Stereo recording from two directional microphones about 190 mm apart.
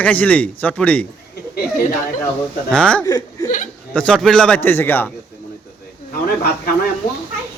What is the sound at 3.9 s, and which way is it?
A man's voice, 5° left (ahead or behind).